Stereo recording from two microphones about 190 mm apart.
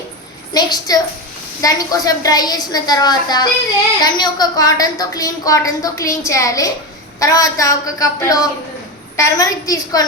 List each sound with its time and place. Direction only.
0.5 s a woman's voice: 20° left (ahead or behind)